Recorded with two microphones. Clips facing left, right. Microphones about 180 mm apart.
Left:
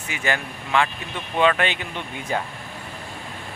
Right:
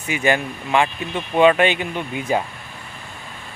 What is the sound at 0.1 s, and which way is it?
Speech, 15° right (ahead or behind).